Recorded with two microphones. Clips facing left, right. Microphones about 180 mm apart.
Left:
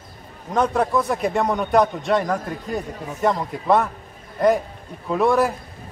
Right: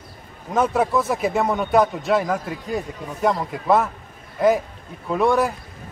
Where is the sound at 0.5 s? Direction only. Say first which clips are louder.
Even; 5° right (ahead or behind).